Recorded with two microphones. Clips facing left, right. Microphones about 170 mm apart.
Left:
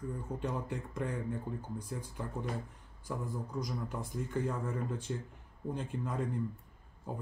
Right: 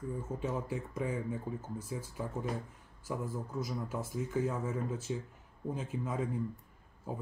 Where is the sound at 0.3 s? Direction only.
5° right (ahead or behind).